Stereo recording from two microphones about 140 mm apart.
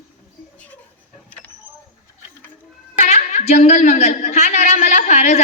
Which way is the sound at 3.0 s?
55° left (ahead or behind).